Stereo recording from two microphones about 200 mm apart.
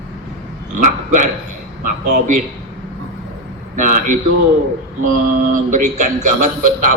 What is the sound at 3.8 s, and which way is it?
Speech, 40° right (ahead or behind).